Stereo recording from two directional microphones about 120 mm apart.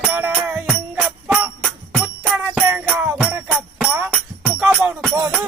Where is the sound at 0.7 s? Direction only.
Centre (ahead or behind).